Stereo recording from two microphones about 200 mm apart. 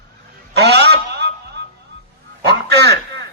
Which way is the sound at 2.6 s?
55° right (ahead or behind).